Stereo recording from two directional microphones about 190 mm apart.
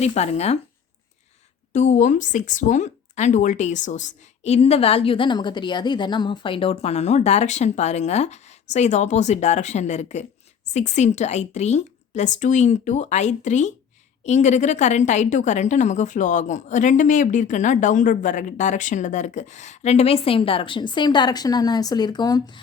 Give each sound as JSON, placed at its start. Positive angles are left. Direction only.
{"t": 0.0, "sound": "speech", "side_deg": 35}
{"t": 1.7, "sound": "speech", "side_deg": 40}